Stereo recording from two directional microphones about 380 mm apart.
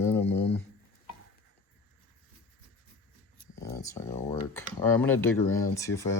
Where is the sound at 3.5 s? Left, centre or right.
Centre.